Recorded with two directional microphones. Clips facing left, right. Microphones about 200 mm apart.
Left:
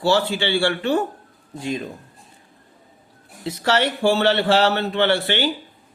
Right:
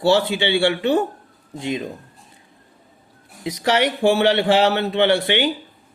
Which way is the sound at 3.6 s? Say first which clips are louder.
Right 2 dB; 15° right (ahead or behind).